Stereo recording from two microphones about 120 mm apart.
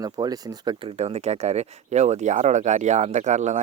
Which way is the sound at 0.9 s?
65° right (ahead or behind).